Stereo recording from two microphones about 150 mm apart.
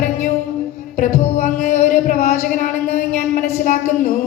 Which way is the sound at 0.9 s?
55° left (ahead or behind).